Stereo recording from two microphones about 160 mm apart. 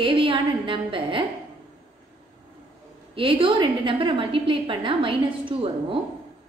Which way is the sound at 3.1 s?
35° right (ahead or behind).